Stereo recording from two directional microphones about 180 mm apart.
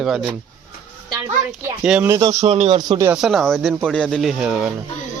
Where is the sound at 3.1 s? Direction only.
Centre (ahead or behind).